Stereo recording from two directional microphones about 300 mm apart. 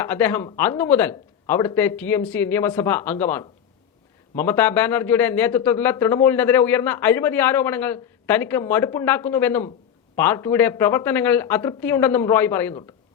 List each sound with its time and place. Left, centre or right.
0.0 s speech: centre